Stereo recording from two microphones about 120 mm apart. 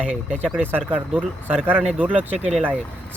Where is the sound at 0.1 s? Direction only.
10° right (ahead or behind).